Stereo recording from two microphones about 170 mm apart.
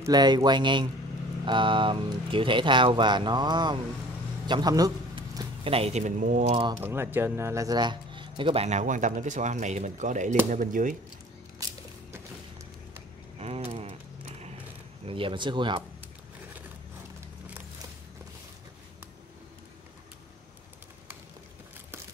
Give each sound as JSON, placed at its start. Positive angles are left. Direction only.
{"t": 0.0, "sound": "speech", "side_deg": -25}
{"t": 6.5, "sound": "speech", "side_deg": -25}
{"t": 6.8, "sound": "speech", "side_deg": -15}
{"t": 8.6, "sound": "speech", "side_deg": -45}
{"t": 13.4, "sound": "mechanisms", "side_deg": -35}
{"t": 15.0, "sound": "speech", "side_deg": -30}